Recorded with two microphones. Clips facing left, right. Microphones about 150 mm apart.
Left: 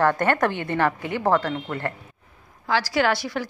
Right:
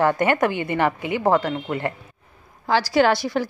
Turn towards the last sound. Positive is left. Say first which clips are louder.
# right 4 dB
turn(degrees=-30)  # may be behind; listen again after turning